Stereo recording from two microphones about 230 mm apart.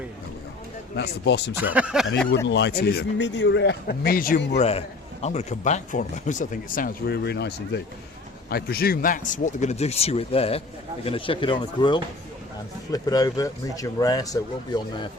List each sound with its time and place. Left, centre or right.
0.9 s speech: left
1.7 s speech: centre
2.5 s speech: left; by 15.0 s centre